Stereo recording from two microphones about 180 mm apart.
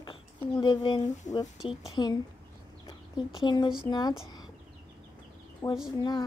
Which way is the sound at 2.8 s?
25° left (ahead or behind).